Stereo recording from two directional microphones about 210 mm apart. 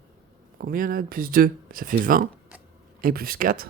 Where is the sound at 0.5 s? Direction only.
40° right (ahead or behind).